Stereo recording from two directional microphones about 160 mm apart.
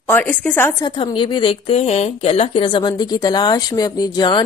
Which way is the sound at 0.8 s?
30° left (ahead or behind).